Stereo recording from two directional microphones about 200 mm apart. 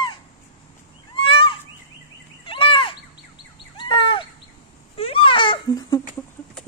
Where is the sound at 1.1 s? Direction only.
25° left (ahead or behind).